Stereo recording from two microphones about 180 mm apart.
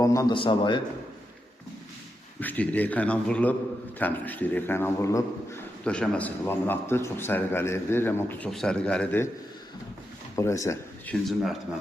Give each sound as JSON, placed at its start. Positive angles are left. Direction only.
{"t": 0.0, "sound": "a man's voice", "side_deg": 20}
{"t": 2.4, "sound": "a man's voice", "side_deg": 10}
{"t": 5.8, "sound": "a man's voice", "side_deg": 5}
{"t": 10.3, "sound": "speech", "side_deg": 15}
{"t": 11.1, "sound": "speech", "side_deg": 0}